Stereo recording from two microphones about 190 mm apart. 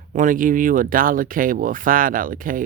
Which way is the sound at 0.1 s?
45° right (ahead or behind).